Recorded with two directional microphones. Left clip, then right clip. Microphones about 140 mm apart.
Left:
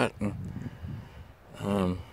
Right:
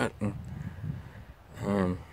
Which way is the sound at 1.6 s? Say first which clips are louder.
Even; 10° left (ahead or behind).